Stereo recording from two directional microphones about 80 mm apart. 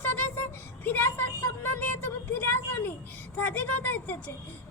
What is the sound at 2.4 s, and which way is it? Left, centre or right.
Speech, left.